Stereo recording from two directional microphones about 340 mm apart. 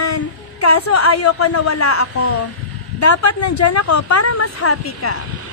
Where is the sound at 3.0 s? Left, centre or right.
Left.